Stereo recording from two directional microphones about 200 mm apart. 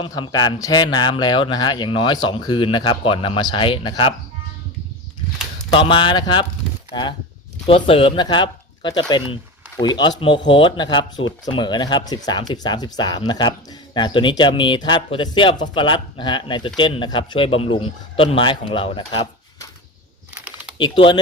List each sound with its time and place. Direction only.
0.0 s speech: 20° left (ahead or behind)
5.7 s speech: 25° left (ahead or behind)
7.7 s speech: 25° left (ahead or behind)
20.4 s typing: 5° right (ahead or behind)
20.7 s speech: 25° left (ahead or behind)